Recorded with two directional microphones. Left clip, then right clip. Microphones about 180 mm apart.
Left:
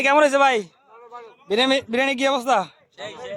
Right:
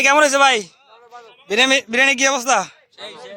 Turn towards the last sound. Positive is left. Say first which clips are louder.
# even
turn(degrees=40)  # may be behind; listen again after turning